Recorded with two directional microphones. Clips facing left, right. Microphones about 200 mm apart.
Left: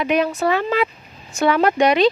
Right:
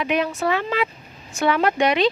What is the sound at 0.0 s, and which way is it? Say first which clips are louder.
Speech: left 3 dB; 40° left (ahead or behind).